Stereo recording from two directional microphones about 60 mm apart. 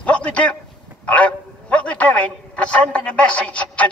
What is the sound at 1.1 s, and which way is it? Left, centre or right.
A man's voice, left.